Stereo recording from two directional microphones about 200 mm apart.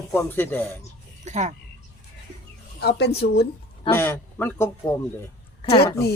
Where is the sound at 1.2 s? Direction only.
35° right (ahead or behind).